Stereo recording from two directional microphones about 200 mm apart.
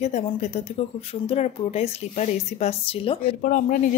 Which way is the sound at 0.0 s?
35° left (ahead or behind).